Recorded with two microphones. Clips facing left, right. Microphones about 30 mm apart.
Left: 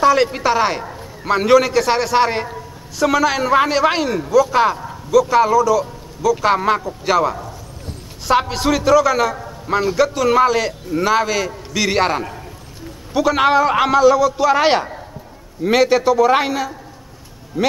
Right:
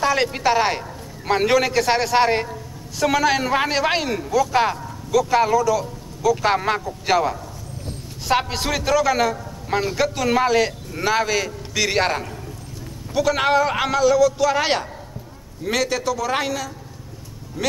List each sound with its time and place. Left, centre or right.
0.0 s a man's voice: centre